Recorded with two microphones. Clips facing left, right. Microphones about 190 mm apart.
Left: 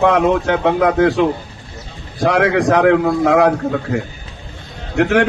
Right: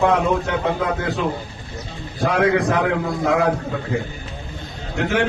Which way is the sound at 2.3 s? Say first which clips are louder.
Left 4 dB; 80° left.